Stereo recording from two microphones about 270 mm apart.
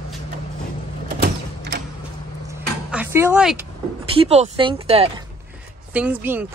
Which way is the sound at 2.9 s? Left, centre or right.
Centre.